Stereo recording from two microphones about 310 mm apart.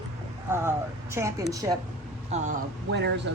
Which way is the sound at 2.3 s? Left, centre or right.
Right.